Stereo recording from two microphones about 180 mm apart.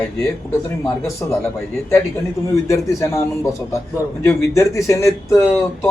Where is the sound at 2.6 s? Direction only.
15° left (ahead or behind).